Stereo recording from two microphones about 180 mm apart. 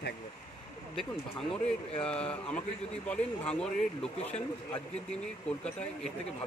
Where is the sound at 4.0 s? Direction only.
30° left (ahead or behind).